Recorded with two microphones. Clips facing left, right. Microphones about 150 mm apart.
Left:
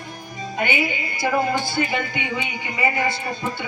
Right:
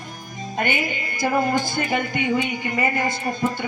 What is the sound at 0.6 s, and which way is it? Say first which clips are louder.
A woman's voice: left 1 dB; 50° right (ahead or behind).